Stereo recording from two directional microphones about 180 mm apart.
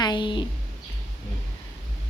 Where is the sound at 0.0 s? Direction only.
25° left (ahead or behind).